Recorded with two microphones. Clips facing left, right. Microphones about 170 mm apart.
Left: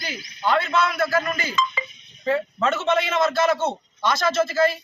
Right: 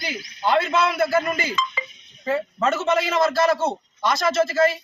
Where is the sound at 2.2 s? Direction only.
5° right (ahead or behind).